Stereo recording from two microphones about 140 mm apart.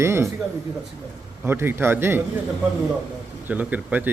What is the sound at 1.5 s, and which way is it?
Speech, 15° right (ahead or behind).